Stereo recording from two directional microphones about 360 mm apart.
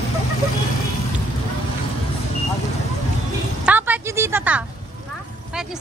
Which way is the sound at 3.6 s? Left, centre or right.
Centre.